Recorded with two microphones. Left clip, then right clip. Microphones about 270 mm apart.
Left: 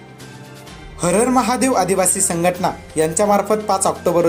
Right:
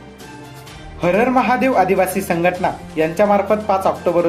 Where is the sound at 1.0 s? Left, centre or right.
Left.